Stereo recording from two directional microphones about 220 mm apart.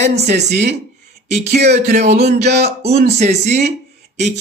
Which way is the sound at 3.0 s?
30° right (ahead or behind).